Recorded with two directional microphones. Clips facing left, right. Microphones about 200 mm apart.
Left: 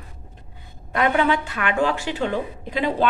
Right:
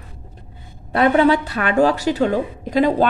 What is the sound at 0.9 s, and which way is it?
A woman's voice, 35° right (ahead or behind).